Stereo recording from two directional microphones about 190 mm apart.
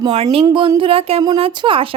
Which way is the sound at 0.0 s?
30° right (ahead or behind).